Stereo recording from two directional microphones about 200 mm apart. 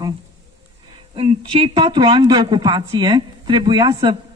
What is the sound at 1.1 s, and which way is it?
A woman's voice, 25° right (ahead or behind).